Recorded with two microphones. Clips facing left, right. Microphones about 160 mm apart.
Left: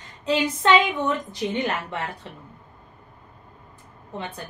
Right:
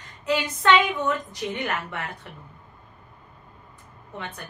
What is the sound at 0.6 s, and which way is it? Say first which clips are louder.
A woman's voice: even; 30° left (ahead or behind).